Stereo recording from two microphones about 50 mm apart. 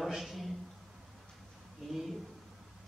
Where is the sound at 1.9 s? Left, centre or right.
Centre.